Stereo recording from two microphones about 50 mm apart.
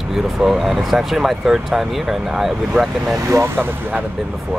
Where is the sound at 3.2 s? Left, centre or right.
Right.